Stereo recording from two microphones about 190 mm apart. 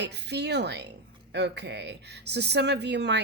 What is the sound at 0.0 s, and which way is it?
A woman's voice, 60° right (ahead or behind).